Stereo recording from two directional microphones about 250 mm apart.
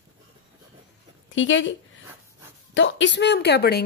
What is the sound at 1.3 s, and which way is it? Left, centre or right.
Speech, left.